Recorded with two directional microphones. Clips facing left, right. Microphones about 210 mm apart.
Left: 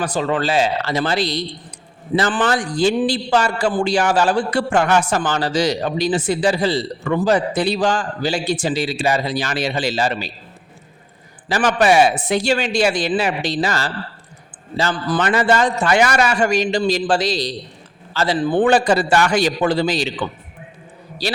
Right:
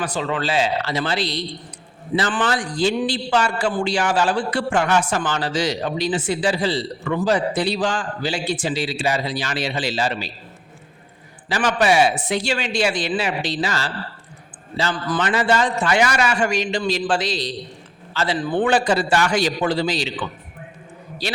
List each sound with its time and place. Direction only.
0.0 s a man's voice: 45° left (ahead or behind)
11.4 s a man's voice: 45° left (ahead or behind)